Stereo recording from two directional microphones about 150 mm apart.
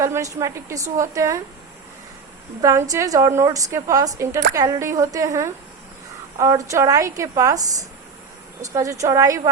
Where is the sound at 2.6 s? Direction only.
20° right (ahead or behind).